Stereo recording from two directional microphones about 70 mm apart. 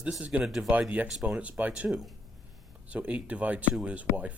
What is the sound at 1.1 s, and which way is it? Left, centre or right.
Speech, centre.